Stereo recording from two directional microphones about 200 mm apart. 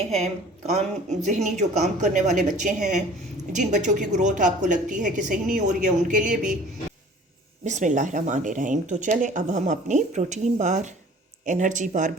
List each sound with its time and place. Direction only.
0.7 s speech: 35° right (ahead or behind)
7.6 s speech: 35° right (ahead or behind)